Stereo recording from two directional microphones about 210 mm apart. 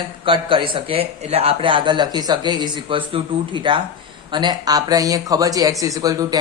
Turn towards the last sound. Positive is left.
turn(degrees=-15)  # may be behind; listen again after turning